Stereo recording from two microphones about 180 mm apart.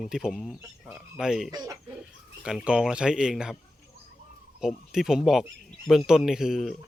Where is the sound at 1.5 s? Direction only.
20° right (ahead or behind).